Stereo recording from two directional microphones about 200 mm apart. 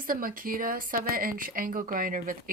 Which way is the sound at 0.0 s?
45° right (ahead or behind).